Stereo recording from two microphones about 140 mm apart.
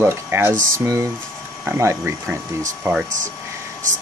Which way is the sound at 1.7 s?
20° right (ahead or behind).